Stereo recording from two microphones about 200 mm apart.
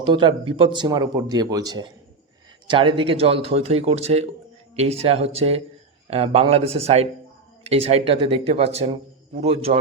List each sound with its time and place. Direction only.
0.0 s speech: 25° right (ahead or behind)